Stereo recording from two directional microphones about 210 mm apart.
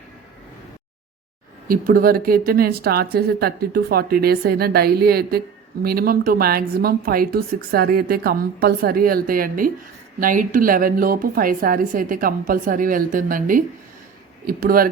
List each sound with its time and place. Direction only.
1.6 s a woman's voice: 40° right (ahead or behind)